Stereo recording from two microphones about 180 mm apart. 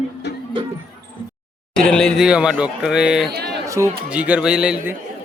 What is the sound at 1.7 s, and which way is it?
A man's voice, 5° left (ahead or behind).